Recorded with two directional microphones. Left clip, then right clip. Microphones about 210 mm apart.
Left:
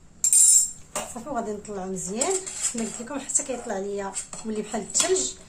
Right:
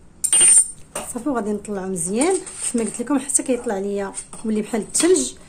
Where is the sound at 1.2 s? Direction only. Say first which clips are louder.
Right 9 dB; 50° right (ahead or behind).